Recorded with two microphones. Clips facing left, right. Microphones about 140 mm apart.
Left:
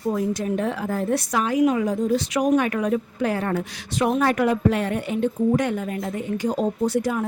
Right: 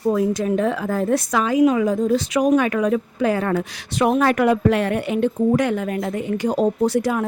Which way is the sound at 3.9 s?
80° right.